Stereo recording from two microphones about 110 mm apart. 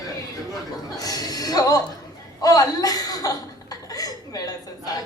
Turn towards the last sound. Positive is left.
turn(degrees=35)  # may be behind; listen again after turning